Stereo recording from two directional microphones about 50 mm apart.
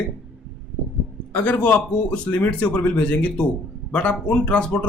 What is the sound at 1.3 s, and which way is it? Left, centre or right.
Speech, left.